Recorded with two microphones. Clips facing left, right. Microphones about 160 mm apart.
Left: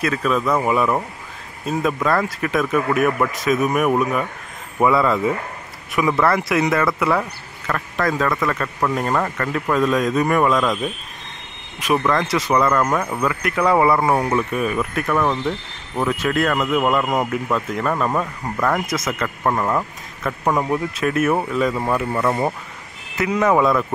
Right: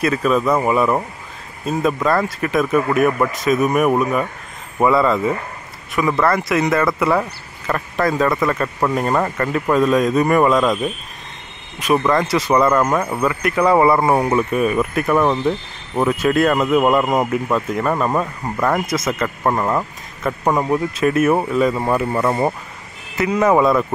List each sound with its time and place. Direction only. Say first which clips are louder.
0.0 s speech: right 3 dB; 5° right (ahead or behind)
1.7 s speech: right 2 dB; centre (ahead or behind)
7.2 s speech: right 3 dB; 10° right (ahead or behind)
11.8 s speech: right 3 dB; centre (ahead or behind); by 17.3 s 20° right (ahead or behind)
17.3 s speech: right 3 dB; 5° right (ahead or behind)
23.1 s speech: right 2 dB; centre (ahead or behind)